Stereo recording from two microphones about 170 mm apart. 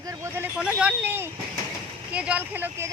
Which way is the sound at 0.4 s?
5° right (ahead or behind).